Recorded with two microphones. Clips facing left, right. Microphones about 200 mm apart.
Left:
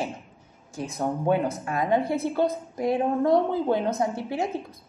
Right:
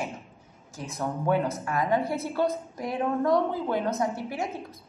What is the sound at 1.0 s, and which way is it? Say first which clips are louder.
Speech: left 2 dB; 20° left (ahead or behind).